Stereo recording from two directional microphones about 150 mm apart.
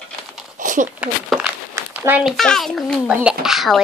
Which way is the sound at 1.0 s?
10° right (ahead or behind).